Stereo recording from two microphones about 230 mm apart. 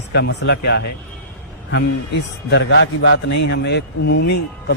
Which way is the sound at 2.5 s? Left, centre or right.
Left.